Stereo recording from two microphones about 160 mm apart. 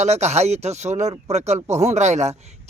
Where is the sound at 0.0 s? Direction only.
45° right (ahead or behind).